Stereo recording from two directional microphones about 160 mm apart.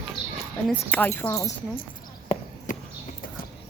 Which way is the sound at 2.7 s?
55° left (ahead or behind).